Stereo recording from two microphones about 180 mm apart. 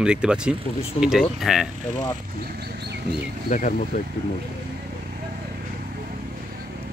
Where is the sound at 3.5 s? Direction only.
45° left (ahead or behind).